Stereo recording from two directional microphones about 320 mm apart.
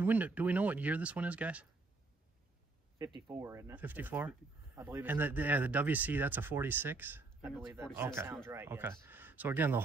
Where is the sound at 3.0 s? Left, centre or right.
Centre.